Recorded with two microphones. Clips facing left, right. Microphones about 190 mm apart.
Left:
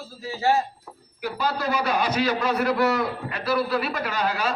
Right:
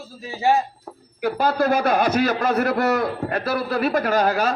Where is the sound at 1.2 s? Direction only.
50° right (ahead or behind).